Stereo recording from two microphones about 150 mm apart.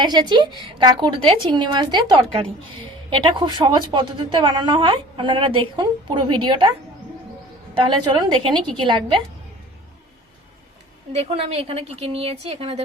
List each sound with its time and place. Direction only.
0.0 s a woman's voice: 30° right (ahead or behind)
7.9 s a woman's voice: 30° right (ahead or behind)
11.1 s a woman's voice: 40° right (ahead or behind)